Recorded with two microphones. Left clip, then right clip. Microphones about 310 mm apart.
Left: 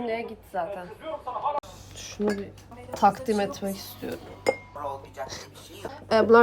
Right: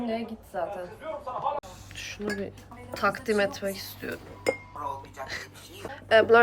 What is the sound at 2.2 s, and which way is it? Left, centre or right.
Speech, centre.